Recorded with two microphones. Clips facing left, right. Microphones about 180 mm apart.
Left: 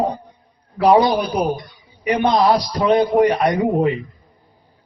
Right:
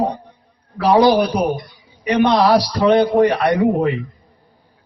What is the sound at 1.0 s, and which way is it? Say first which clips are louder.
A man's voice: right 4 dB; 70° right (ahead or behind).